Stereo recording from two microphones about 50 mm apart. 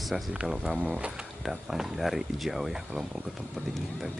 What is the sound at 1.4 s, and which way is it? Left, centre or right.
Speech, centre.